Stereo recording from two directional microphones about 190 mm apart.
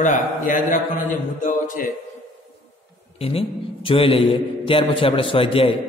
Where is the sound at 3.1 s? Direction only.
30° left (ahead or behind).